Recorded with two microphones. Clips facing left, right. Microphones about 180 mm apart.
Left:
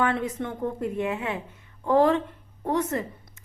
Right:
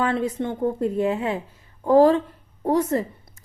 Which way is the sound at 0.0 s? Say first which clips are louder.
Right 3 dB; 30° right (ahead or behind).